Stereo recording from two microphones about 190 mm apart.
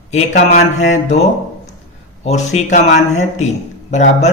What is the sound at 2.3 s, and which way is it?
Speech, 35° left (ahead or behind).